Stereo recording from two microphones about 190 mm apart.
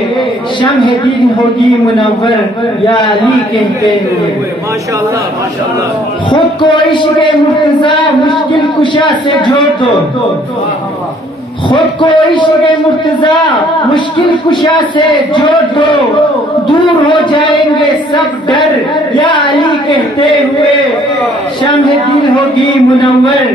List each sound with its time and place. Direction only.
0.6 s a man's voice: 25° left (ahead or behind)
6.6 s a man's voice: 25° left (ahead or behind)
11.7 s a man's voice: 25° left (ahead or behind)
22.6 s a man's voice: 25° left (ahead or behind)